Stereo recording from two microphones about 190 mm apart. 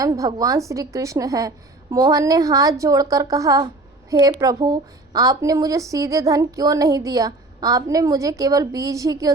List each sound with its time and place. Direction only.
0.0 s a woman's voice: 20° right (ahead or behind)